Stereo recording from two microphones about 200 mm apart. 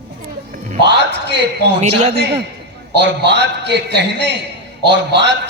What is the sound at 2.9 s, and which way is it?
A woman's voice, 60° right (ahead or behind).